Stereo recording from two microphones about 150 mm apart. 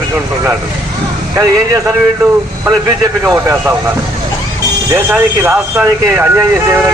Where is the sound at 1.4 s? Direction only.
20° right (ahead or behind).